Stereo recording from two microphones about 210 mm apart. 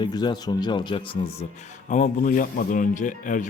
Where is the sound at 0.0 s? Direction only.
20° left (ahead or behind).